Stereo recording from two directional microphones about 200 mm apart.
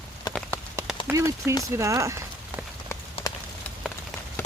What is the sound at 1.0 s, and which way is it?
Speech, 15° right (ahead or behind).